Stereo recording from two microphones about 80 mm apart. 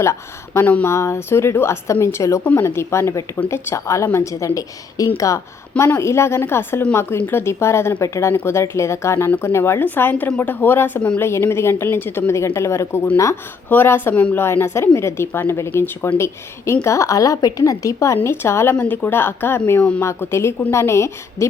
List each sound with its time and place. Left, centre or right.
0.0 s a woman's voice: left
0.6 s a woman's voice: centre
0.9 s a woman's voice: left
2.4 s a woman's voice: left
2.6 s a woman's voice: left
5.7 s a woman's voice: left
13.7 s a woman's voice: left